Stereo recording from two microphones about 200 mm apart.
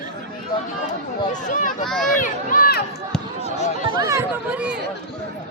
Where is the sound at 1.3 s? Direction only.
40° left (ahead or behind).